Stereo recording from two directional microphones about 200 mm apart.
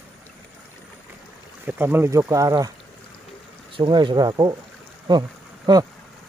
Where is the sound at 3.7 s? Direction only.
25° right (ahead or behind).